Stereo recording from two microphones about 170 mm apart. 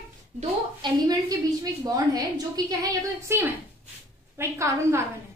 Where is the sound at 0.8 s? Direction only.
25° right (ahead or behind).